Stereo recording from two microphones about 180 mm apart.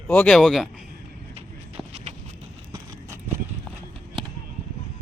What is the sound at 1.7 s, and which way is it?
Walk, 35° right (ahead or behind).